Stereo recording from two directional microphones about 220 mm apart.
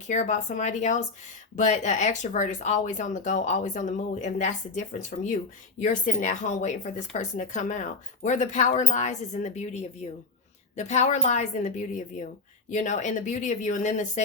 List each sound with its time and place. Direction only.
0.1 s speech: 35° left (ahead or behind)